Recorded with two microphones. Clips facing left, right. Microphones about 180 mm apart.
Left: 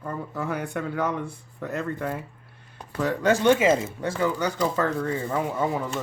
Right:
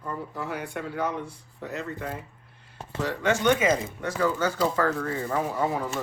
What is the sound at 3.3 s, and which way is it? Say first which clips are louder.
Speech: left 3 dB; 30° left (ahead or behind).